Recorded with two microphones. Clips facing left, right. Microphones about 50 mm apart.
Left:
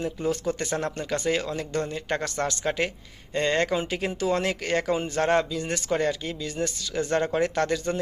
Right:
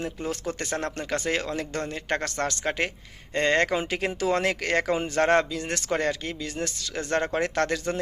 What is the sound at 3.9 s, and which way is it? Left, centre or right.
Speech, right.